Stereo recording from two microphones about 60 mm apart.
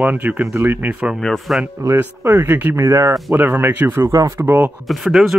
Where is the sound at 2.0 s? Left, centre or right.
Right.